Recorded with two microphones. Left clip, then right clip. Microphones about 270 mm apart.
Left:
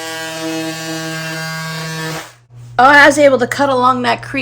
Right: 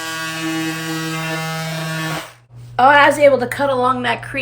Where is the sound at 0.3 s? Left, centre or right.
Centre.